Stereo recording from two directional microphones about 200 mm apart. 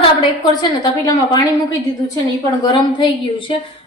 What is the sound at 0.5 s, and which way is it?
Speech, 20° left (ahead or behind).